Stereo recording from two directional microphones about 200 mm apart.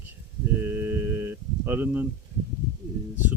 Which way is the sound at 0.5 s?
10° right (ahead or behind).